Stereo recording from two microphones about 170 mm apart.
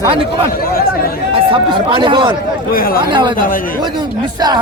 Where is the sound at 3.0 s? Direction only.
30° right (ahead or behind).